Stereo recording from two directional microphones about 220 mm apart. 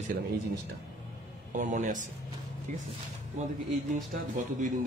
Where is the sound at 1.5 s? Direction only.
35° right (ahead or behind).